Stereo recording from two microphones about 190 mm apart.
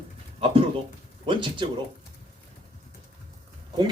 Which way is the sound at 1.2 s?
25° right (ahead or behind).